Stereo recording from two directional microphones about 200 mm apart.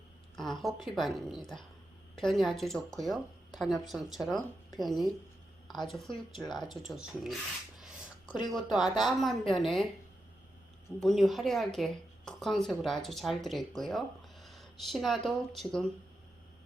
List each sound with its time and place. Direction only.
0.3 s a woman's voice: centre (ahead or behind)
7.8 s a sound: 5° right (ahead or behind)
8.5 s a woman's voice: centre (ahead or behind)
11.0 s a woman's voice: centre (ahead or behind)